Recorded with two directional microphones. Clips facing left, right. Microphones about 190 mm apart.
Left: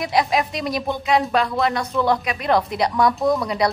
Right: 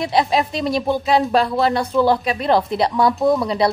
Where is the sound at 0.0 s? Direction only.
30° right (ahead or behind).